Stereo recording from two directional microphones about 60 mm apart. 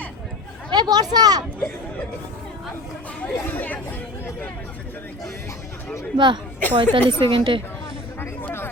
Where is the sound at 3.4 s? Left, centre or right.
Left.